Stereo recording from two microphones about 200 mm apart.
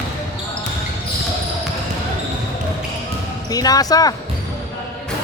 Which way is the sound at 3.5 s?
20° left (ahead or behind).